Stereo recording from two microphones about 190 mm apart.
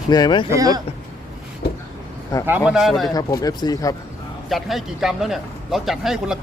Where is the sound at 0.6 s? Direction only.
20° right (ahead or behind).